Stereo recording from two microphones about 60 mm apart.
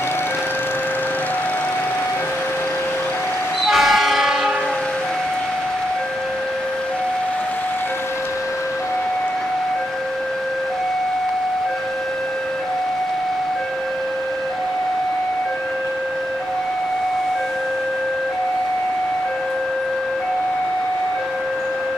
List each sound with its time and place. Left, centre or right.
3.6 s train: centre